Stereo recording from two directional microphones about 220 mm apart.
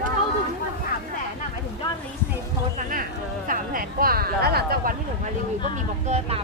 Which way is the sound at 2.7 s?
40° right (ahead or behind).